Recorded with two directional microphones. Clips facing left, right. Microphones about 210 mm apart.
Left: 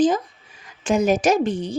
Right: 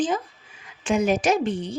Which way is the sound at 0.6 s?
45° left (ahead or behind).